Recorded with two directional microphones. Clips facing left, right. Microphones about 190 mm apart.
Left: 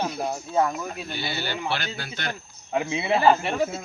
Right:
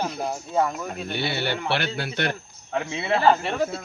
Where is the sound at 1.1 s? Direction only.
65° right (ahead or behind).